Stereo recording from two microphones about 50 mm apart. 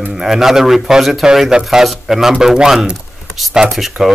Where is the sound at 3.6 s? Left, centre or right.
Centre.